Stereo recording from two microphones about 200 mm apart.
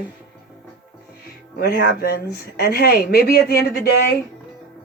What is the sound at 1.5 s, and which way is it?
Speech, 55° left (ahead or behind).